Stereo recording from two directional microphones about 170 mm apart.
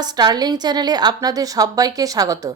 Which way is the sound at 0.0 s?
25° right (ahead or behind).